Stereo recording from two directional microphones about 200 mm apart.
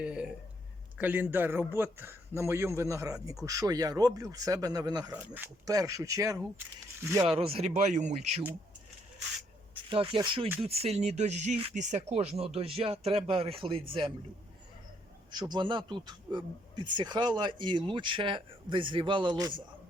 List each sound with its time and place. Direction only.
0.0 s a man's voice: 5° right (ahead or behind)
5.1 s a man's voice: 10° right (ahead or behind)
7.3 s speech: 30° right (ahead or behind)
9.9 s speech: 25° right (ahead or behind)
15.3 s speech: 20° right (ahead or behind)